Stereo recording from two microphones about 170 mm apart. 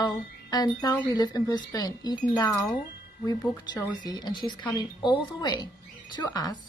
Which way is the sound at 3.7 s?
25° left (ahead or behind).